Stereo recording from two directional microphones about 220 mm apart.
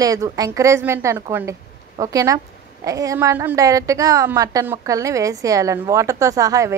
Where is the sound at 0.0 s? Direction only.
15° right (ahead or behind).